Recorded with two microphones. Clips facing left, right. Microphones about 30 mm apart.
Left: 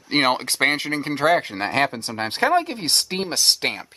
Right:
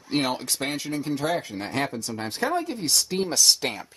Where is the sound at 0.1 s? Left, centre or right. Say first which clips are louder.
Left 6 dB; left.